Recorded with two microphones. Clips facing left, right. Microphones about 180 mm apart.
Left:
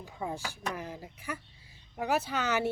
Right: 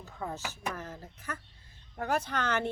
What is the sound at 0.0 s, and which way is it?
A woman's voice, 10° left (ahead or behind).